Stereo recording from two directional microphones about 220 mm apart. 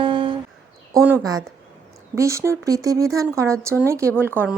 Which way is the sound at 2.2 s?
15° right (ahead or behind).